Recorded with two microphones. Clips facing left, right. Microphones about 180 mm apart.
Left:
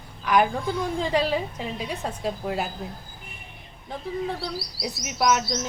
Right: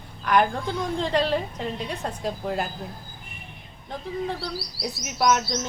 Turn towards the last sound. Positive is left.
turn(degrees=0)  # may be behind; listen again after turning